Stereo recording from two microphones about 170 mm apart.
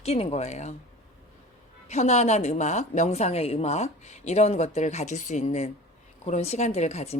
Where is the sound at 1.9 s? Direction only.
40° left (ahead or behind).